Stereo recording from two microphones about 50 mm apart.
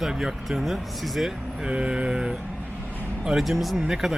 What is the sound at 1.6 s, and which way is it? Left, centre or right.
Speech, centre.